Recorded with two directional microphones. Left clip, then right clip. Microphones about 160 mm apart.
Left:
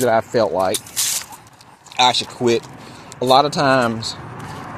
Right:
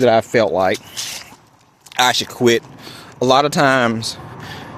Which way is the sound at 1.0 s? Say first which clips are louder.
Left 4 dB; 20° left (ahead or behind).